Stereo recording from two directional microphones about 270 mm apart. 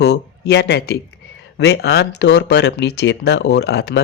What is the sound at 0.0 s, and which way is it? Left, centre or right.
Speech, left.